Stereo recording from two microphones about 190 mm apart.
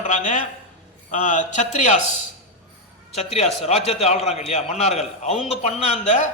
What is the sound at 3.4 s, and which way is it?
A man's voice, 30° left (ahead or behind).